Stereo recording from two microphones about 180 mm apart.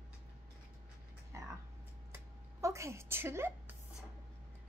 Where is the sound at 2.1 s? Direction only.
15° right (ahead or behind).